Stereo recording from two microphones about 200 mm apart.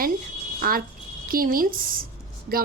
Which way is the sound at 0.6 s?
45° right (ahead or behind).